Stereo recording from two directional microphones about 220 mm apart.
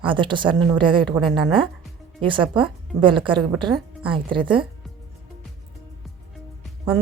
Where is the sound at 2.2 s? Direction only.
20° right (ahead or behind).